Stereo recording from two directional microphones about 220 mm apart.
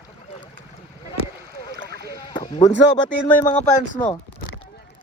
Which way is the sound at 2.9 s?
30° left (ahead or behind).